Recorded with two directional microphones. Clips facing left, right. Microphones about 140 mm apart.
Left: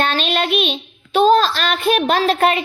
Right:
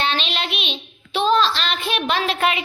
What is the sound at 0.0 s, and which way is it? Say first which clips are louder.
Child singing: left 5 dB; 45° left (ahead or behind).